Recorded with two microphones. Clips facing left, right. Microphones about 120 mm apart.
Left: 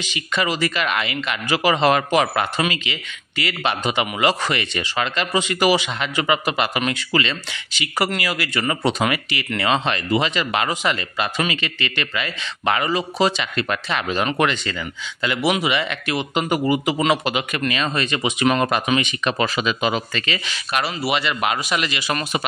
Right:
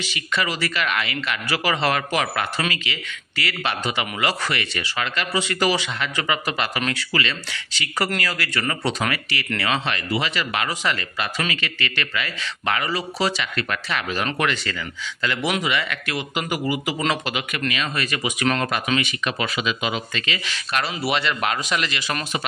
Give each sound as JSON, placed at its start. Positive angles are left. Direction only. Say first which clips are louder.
{"t": 0.0, "sound": "speech", "louder": "left 2 dB", "side_deg": 20}
{"t": 19.3, "sound": "speech", "louder": "left 4 dB", "side_deg": 35}
{"t": 19.6, "sound": "speech", "louder": "left 4 dB", "side_deg": 45}
{"t": 20.4, "sound": "a man's voice", "louder": "left 2 dB", "side_deg": 10}